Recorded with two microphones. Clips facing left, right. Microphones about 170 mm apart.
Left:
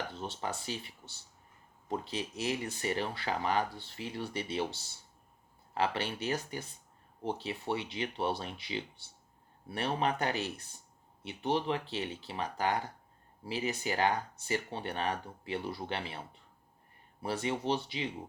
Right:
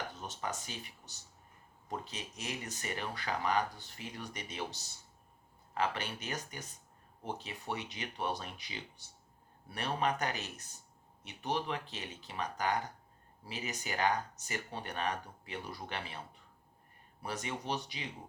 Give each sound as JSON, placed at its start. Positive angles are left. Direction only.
{"t": 0.1, "sound": "speech", "side_deg": 30}
{"t": 17.2, "sound": "speech", "side_deg": 30}